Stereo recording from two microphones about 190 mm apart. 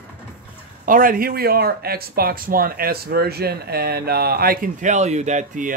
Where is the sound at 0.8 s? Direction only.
45° right (ahead or behind).